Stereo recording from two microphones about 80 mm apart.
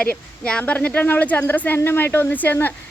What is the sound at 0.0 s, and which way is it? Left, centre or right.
Speech, centre.